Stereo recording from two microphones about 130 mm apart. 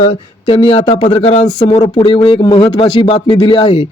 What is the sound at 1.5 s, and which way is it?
A man's voice, 40° left (ahead or behind).